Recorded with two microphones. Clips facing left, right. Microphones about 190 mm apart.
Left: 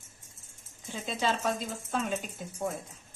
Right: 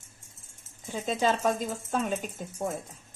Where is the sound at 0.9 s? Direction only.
45° right (ahead or behind).